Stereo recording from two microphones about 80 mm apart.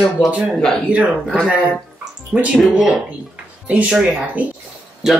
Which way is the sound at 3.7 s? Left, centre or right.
Centre.